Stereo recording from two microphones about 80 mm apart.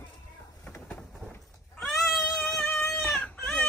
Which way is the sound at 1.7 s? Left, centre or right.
Centre.